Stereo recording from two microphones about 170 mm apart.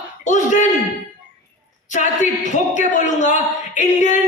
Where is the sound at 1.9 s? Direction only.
45° left (ahead or behind).